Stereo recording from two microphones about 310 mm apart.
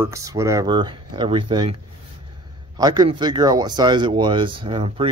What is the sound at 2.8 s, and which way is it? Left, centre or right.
Speech, centre.